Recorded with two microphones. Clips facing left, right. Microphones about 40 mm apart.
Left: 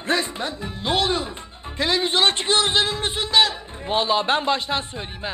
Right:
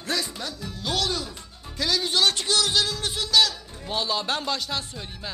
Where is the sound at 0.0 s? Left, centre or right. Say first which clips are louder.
Left 6 dB; left.